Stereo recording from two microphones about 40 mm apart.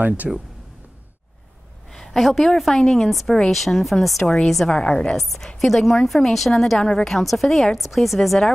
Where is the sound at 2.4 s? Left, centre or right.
Centre.